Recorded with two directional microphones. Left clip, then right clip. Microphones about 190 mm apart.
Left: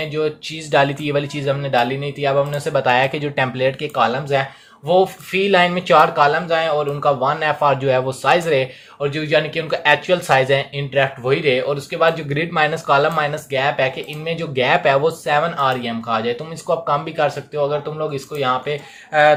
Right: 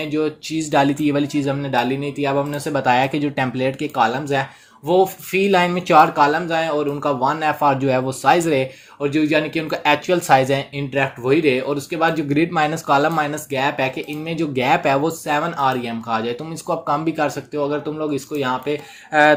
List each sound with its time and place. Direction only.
0.1 s speech: 35° right (ahead or behind)